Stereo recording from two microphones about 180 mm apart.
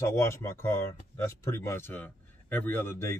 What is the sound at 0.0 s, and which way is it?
Speech, 15° left (ahead or behind).